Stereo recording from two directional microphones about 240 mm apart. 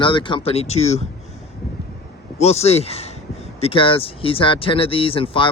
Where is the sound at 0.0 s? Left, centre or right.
Centre.